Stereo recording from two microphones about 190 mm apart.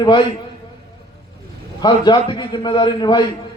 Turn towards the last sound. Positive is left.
turn(degrees=25)  # may be behind; listen again after turning